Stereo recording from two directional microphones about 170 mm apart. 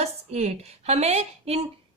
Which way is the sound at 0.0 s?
40° right (ahead or behind).